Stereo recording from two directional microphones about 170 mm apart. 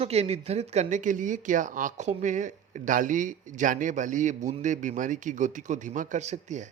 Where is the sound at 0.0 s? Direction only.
40° right (ahead or behind).